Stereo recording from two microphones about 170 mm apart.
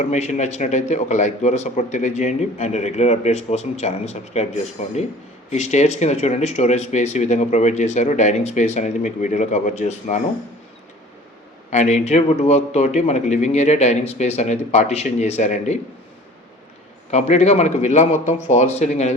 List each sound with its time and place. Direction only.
0.1 s a man's voice: 40° left (ahead or behind)
11.7 s a man's voice: 40° left (ahead or behind)
17.1 s a man's voice: 40° left (ahead or behind)